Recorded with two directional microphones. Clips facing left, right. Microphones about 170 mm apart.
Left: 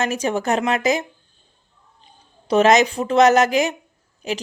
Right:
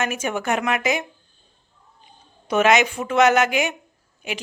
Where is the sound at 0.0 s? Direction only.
35° left (ahead or behind).